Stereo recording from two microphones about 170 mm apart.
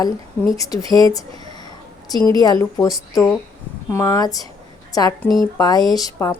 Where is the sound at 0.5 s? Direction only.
20° left (ahead or behind).